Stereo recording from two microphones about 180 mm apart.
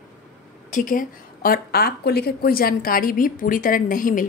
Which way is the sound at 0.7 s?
50° left (ahead or behind).